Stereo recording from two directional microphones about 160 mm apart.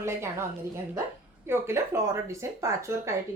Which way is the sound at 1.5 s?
15° right (ahead or behind).